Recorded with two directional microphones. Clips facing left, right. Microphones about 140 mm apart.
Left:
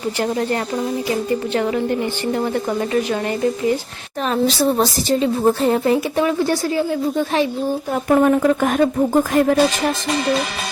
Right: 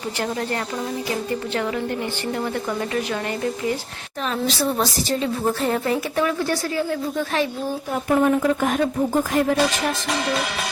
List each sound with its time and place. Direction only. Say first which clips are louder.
0.2 s a woman's voice: left 5 dB; 25° left (ahead or behind)
4.3 s a woman's voice: left 6 dB; 30° left (ahead or behind)
8.1 s speech: left 4 dB; 55° left (ahead or behind)